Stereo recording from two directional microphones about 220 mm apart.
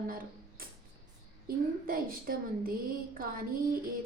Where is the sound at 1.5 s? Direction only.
40° right (ahead or behind).